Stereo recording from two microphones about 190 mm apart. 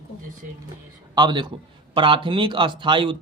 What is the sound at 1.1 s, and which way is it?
A man's voice, 25° right (ahead or behind).